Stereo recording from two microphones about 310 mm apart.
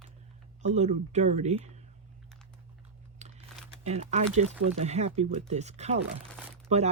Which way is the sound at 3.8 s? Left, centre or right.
Right.